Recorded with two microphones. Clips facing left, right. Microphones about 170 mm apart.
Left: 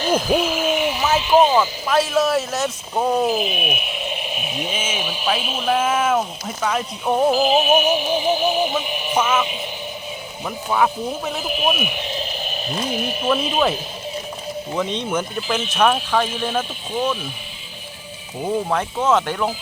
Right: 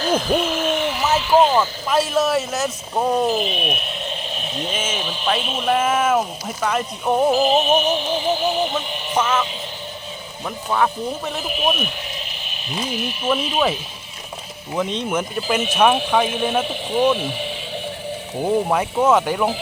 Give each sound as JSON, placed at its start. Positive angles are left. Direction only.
{"t": 0.0, "sound": "a sound", "side_deg": 5}
{"t": 1.9, "sound": "speech", "side_deg": -5}
{"t": 10.7, "sound": "speech", "side_deg": 5}
{"t": 11.9, "sound": "speech", "side_deg": 20}
{"t": 12.9, "sound": "speech", "side_deg": 45}
{"t": 13.2, "sound": "speech", "side_deg": 0}
{"t": 14.8, "sound": "speech", "side_deg": -5}
{"t": 18.7, "sound": "speech", "side_deg": -10}